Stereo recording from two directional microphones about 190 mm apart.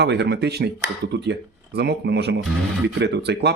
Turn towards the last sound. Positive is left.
turn(degrees=-60)  # may be behind; listen again after turning